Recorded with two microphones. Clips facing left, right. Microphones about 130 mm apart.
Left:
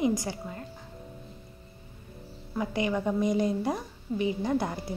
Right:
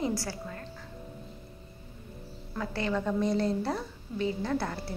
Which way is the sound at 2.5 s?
15° left (ahead or behind).